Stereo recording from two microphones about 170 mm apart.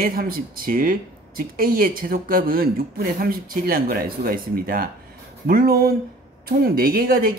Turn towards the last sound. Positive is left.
turn(degrees=-60)  # may be behind; listen again after turning